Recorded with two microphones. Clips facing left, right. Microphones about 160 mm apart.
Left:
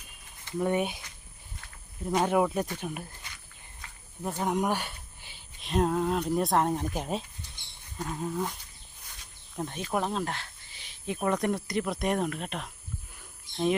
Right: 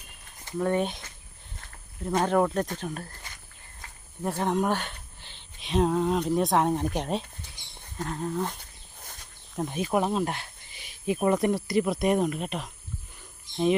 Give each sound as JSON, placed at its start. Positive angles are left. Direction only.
{"t": 0.6, "sound": "speech", "side_deg": 10}
{"t": 2.0, "sound": "speech", "side_deg": 10}
{"t": 4.2, "sound": "speech", "side_deg": 0}
{"t": 4.4, "sound": "speech", "side_deg": 10}
{"t": 9.0, "sound": "a sound", "side_deg": -50}
{"t": 9.6, "sound": "speech", "side_deg": -10}